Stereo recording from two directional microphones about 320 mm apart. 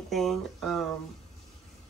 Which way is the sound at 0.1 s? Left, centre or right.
Centre.